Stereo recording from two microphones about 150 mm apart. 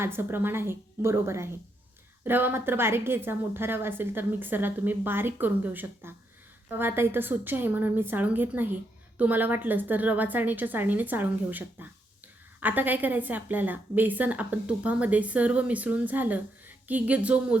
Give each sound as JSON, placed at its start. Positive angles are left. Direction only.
{"t": 0.0, "sound": "a woman's voice", "side_deg": -15}